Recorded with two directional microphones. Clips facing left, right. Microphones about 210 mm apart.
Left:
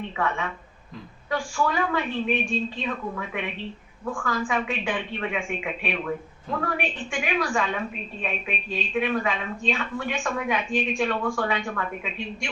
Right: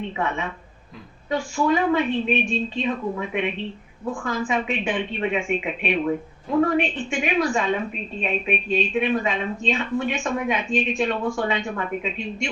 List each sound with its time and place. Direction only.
0.2 s a woman's voice: 20° right (ahead or behind)